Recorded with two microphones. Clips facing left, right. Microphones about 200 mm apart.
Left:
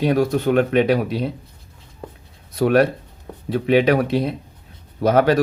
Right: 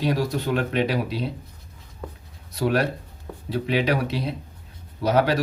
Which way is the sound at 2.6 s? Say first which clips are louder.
Left 7 dB; 55° left (ahead or behind).